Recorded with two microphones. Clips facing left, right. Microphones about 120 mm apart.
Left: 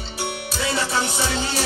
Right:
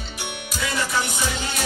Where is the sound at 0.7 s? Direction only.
30° left (ahead or behind).